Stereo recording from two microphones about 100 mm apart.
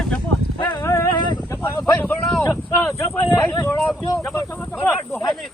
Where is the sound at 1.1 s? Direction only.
50° left (ahead or behind).